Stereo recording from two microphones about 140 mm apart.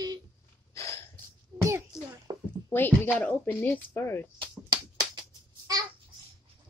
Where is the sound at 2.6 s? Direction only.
15° left (ahead or behind).